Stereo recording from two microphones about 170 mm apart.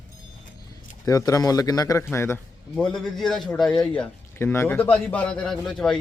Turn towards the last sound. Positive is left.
turn(degrees=5)  # may be behind; listen again after turning